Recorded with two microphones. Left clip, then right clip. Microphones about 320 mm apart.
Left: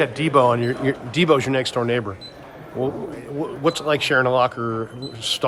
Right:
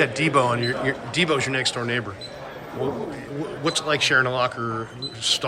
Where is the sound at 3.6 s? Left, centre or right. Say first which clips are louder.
Left 2 dB; centre.